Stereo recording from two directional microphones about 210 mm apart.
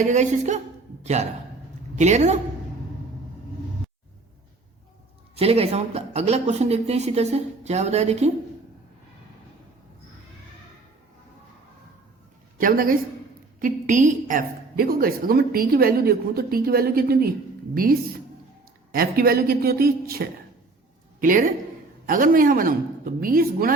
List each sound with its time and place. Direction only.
0.0 s speech: 35° right (ahead or behind)
5.4 s speech: 30° right (ahead or behind)
12.5 s a woman's voice: 45° right (ahead or behind)
18.9 s a woman's voice: 45° right (ahead or behind)